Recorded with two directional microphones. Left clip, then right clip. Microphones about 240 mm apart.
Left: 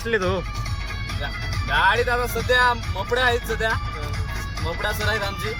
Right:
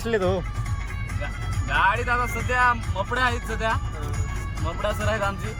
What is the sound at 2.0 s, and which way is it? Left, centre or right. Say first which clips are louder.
Speech: left 3 dB; centre.